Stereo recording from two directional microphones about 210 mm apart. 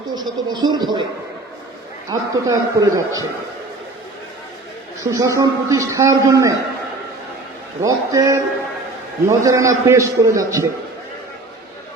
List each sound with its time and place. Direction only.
0.3 s speech: 20° right (ahead or behind)
2.0 s a man's voice: 15° right (ahead or behind)
5.0 s a man's voice: 15° right (ahead or behind)
7.8 s a man's voice: 15° right (ahead or behind)